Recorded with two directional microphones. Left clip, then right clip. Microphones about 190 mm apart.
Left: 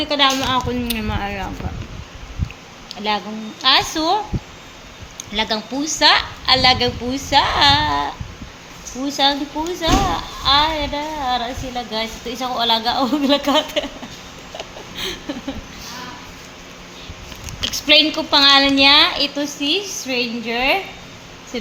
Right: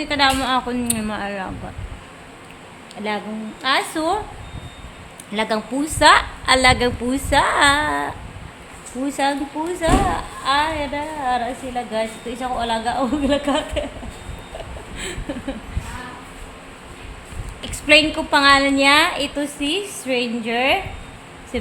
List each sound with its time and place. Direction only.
0.0 s a woman's voice: 10° right (ahead or behind)
2.9 s a woman's voice: 5° right (ahead or behind)
5.3 s a woman's voice: 25° right (ahead or behind)
9.8 s a woman's voice: centre (ahead or behind)
17.6 s a woman's voice: 5° right (ahead or behind)